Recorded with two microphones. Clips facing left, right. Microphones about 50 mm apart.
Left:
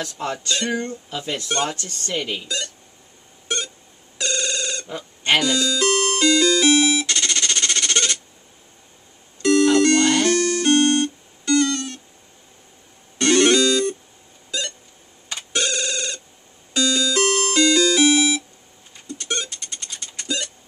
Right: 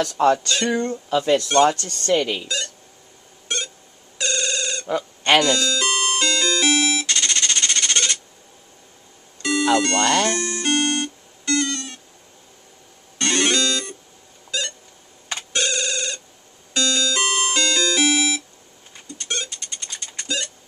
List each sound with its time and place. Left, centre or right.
0.0 s speech: right
2.4 s speech: centre
3.4 s squeak: centre
4.2 s telephone bell ringing: centre
4.8 s telephone bell ringing: right
5.4 s speech: centre
5.9 s music: centre
9.4 s music: centre
13.2 s music: centre
15.5 s telephone: centre
16.7 s music: centre
17.2 s music: centre
17.6 s music: centre